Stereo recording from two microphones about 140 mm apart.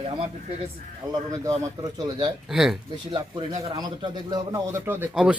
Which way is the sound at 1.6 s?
25° right (ahead or behind).